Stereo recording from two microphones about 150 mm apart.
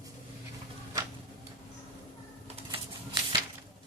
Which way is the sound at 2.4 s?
40° right (ahead or behind).